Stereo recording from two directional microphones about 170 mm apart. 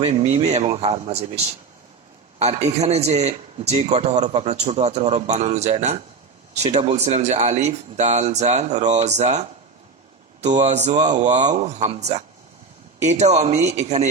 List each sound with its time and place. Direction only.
0.0 s a man's voice: 35° right (ahead or behind)
13.0 s a man's voice: 40° right (ahead or behind)